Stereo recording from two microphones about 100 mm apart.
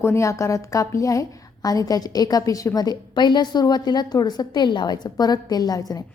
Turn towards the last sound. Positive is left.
turn(degrees=40)  # may be behind; listen again after turning